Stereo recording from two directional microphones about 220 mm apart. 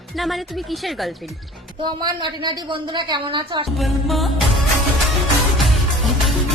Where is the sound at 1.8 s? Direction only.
20° right (ahead or behind).